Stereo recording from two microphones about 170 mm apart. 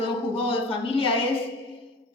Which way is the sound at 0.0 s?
30° left (ahead or behind).